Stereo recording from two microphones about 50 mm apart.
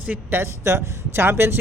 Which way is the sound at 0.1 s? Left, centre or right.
Right.